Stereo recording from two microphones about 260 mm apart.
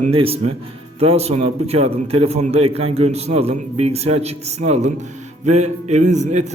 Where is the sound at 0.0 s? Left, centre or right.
Right.